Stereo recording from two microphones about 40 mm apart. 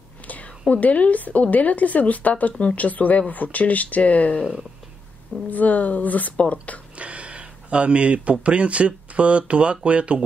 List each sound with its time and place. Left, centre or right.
0.3 s a woman's voice: left
5.5 s a woman's voice: left
7.0 s speech: right